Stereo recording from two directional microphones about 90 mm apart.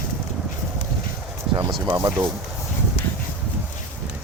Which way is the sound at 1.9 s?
35° right (ahead or behind).